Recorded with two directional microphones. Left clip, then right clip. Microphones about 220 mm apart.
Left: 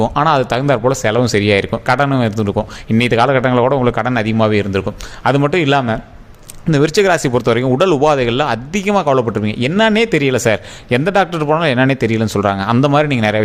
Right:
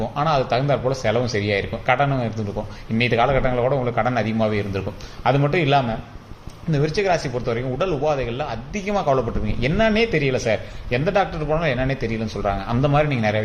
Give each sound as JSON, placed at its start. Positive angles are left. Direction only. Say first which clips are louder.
{"t": 0.0, "sound": "speech", "louder": "left 8 dB", "side_deg": 50}